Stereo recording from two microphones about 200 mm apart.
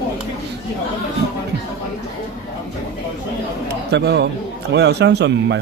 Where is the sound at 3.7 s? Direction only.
55° right (ahead or behind).